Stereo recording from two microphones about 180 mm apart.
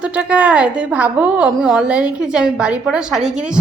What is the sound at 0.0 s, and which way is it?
A woman's voice, 5° right (ahead or behind).